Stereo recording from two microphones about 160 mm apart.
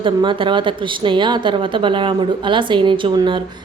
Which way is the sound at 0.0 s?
30° right (ahead or behind).